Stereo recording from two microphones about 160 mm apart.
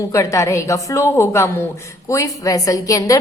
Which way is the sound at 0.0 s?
20° left (ahead or behind).